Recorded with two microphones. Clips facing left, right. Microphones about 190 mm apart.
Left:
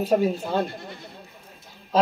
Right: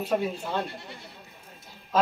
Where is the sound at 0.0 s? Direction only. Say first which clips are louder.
Left 6 dB; 40° left (ahead or behind).